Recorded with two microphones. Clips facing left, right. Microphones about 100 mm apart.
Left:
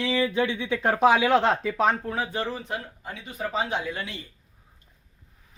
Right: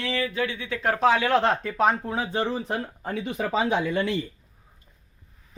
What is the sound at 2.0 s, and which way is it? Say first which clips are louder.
Speech: right 2 dB; 25° right (ahead or behind).